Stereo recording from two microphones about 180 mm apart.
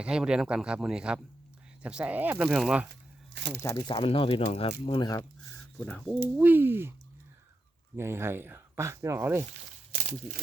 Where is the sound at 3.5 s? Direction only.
15° left (ahead or behind).